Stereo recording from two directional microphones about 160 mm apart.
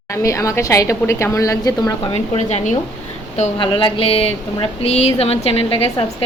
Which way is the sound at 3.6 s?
30° left (ahead or behind).